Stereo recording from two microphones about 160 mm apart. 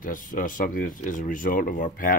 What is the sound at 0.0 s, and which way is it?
Speech, 60° left (ahead or behind).